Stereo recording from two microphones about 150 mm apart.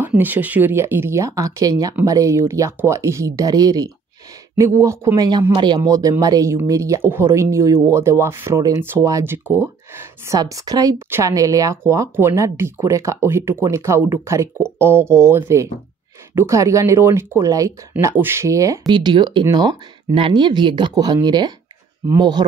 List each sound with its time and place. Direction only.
0.2 s speech: 10° right (ahead or behind)